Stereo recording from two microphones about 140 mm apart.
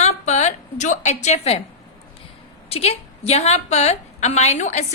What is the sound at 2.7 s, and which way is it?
A woman's voice, 50° left (ahead or behind).